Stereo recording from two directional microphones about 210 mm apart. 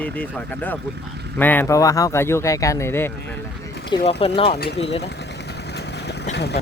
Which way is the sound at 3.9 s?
30° left (ahead or behind).